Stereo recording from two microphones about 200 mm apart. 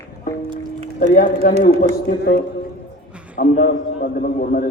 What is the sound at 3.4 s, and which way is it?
A man's voice, 45° left (ahead or behind).